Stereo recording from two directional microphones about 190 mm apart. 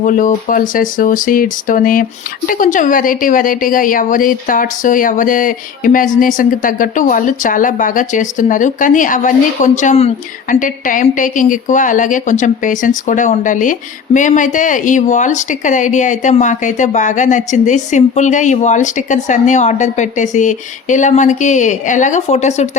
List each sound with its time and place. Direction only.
0.0 s a woman's voice: 45° left (ahead or behind)